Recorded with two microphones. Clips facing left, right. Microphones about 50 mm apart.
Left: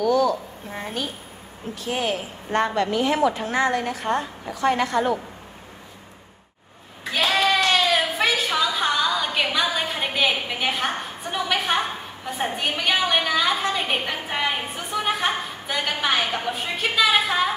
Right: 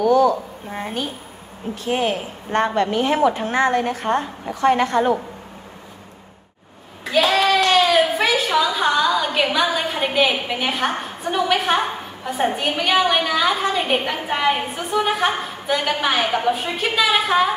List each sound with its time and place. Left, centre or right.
0.0 s a sound: right
1.9 s a woman's voice: right
7.4 s a woman's voice: centre